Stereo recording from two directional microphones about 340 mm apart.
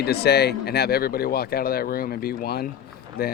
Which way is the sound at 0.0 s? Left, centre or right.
Left.